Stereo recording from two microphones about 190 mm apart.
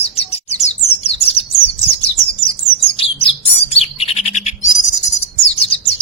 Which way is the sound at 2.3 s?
30° left (ahead or behind).